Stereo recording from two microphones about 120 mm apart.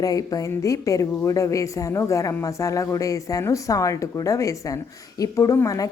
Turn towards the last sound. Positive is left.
turn(degrees=30)  # may be behind; listen again after turning